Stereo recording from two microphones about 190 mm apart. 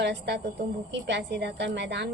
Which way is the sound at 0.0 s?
65° right (ahead or behind).